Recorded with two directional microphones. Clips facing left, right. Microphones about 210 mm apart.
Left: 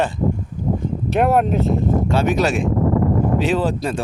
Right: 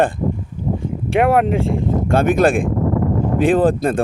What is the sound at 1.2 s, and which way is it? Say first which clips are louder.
Speech: right 2 dB; 80° right.